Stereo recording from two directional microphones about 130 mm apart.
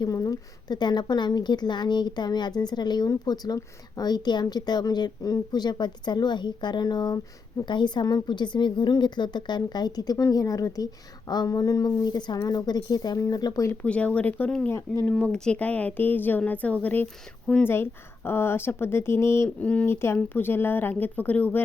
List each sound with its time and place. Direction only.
0.0 s a woman's voice: 30° left (ahead or behind)
13.8 s speech: 10° left (ahead or behind)